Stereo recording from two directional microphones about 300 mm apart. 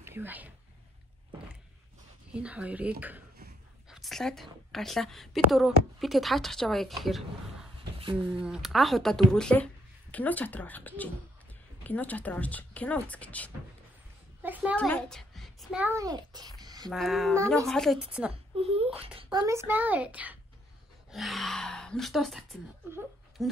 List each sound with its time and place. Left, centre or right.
0.0 s a woman's voice: centre
2.3 s speech: centre
3.9 s speech: centre
8.0 s speech: centre
8.4 s a child's voice: centre
16.9 s speech: centre
18.3 s speech: centre